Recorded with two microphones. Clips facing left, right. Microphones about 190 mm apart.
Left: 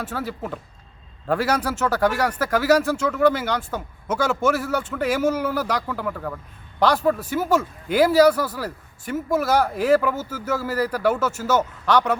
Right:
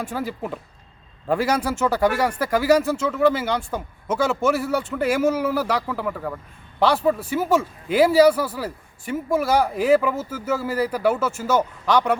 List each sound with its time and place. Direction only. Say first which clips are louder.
0.0 s speech: right 1 dB; 10° right (ahead or behind)